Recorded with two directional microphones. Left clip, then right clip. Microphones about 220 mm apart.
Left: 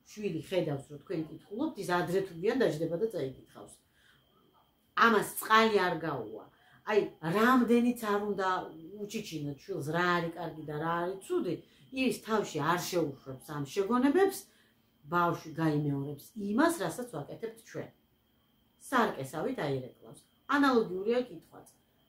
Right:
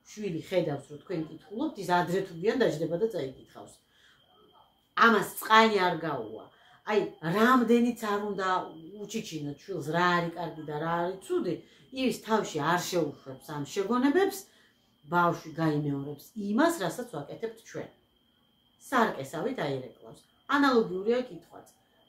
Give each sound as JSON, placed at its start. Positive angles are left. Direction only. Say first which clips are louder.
{"t": 0.0, "sound": "speech", "louder": "right 1 dB", "side_deg": 10}
{"t": 4.9, "sound": "speech", "louder": "right 3 dB", "side_deg": 10}